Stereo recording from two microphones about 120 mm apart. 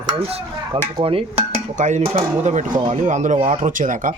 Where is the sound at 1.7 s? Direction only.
85° right.